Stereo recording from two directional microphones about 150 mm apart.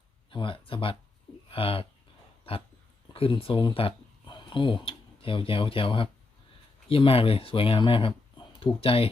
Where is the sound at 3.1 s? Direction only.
35° left (ahead or behind).